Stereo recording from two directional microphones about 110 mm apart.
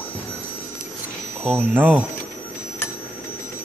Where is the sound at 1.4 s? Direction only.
15° right (ahead or behind).